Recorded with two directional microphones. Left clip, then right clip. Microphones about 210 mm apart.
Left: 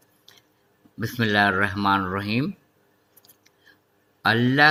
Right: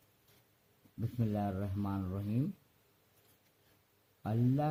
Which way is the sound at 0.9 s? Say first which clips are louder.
Left 18 dB; 30° left (ahead or behind).